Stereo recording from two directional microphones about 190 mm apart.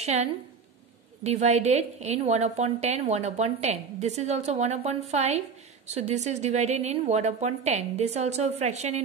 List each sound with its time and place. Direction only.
0.0 s a woman's voice: 35° right (ahead or behind)